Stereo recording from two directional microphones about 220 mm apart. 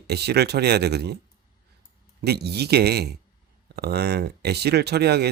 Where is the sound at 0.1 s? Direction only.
50° right (ahead or behind).